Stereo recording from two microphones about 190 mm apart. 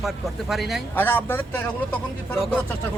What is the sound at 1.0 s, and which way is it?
Speech, 10° left (ahead or behind).